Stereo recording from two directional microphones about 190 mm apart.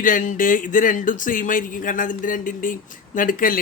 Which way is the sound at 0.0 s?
45° left (ahead or behind).